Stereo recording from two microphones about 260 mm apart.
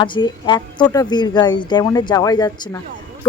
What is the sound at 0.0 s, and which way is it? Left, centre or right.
A woman's voice, centre.